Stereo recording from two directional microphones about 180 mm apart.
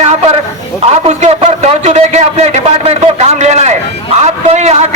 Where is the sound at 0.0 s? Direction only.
35° right (ahead or behind).